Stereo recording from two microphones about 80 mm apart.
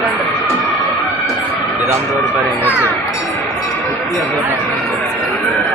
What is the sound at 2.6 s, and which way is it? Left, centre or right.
Speech, right.